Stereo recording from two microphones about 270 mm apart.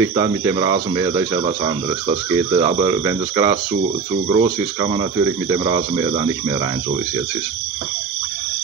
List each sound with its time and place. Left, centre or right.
0.0 s speech: centre